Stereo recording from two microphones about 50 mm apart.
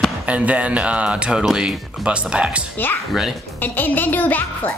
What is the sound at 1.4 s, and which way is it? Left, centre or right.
Speech, centre.